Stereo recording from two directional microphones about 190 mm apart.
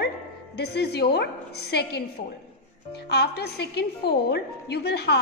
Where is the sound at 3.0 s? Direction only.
60° left (ahead or behind).